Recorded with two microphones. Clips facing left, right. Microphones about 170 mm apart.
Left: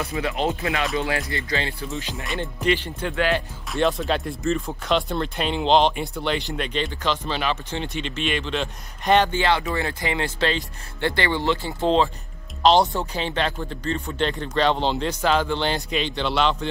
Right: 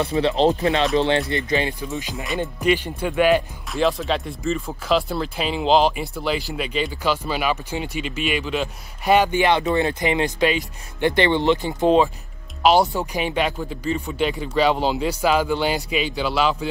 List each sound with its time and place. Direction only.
0.0 s speech: 30° right (ahead or behind); by 3.4 s 10° right (ahead or behind)
3.7 s speech: centre (ahead or behind)